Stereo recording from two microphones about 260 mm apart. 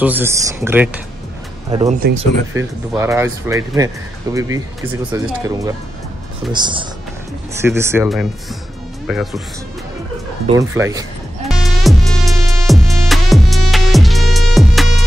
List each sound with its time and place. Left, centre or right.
0.0 s speech: centre
1.9 s speech: right
2.5 s speech: centre
10.4 s speech: centre
11.4 s music: centre